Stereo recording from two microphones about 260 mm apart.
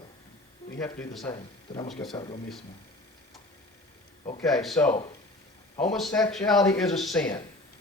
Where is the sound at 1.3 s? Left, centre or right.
Centre.